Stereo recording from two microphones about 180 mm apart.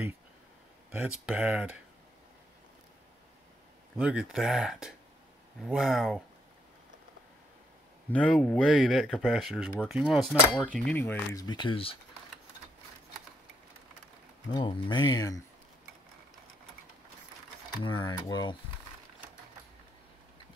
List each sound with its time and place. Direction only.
0.9 s speech: 5° right (ahead or behind)
4.0 s speech: 5° right (ahead or behind)
8.1 s speech: 5° left (ahead or behind)
11.4 s speech: 25° left (ahead or behind)
14.5 s speech: 25° left (ahead or behind)
17.8 s speech: 25° left (ahead or behind)